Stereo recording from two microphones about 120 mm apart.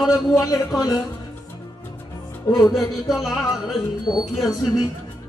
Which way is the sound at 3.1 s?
5° right (ahead or behind).